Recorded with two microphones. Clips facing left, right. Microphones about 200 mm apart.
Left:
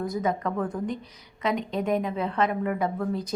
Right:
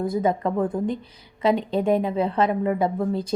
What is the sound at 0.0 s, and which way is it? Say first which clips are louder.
A woman's voice: right 5 dB; 30° right (ahead or behind).